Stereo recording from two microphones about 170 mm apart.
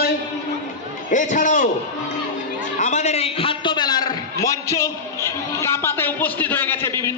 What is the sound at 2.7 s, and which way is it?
A man's voice, 45° left (ahead or behind).